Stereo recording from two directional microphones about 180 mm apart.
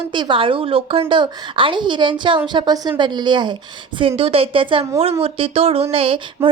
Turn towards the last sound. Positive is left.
turn(degrees=-30)  # may be behind; listen again after turning